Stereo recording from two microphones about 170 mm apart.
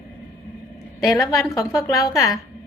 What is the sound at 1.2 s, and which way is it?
A woman's voice, 20° left (ahead or behind).